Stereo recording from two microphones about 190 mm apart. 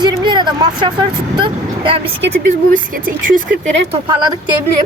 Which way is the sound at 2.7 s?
45° right (ahead or behind).